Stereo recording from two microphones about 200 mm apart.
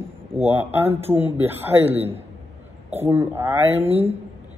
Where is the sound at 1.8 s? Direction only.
30° right (ahead or behind).